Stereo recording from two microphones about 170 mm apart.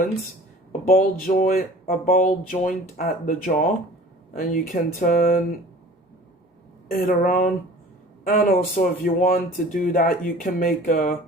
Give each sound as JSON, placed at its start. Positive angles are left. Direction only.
{"t": 0.9, "sound": "speech", "side_deg": 55}
{"t": 7.0, "sound": "speech", "side_deg": 55}